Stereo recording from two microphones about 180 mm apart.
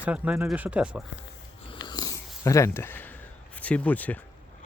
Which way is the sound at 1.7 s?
25° left (ahead or behind).